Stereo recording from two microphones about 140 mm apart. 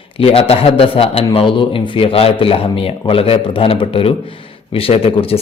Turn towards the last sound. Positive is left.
turn(degrees=40)  # may be behind; listen again after turning